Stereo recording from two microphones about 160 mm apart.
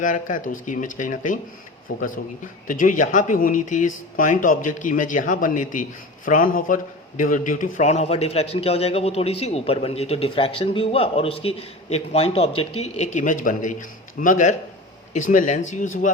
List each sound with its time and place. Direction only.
0.0 s a man's voice: 55° left (ahead or behind)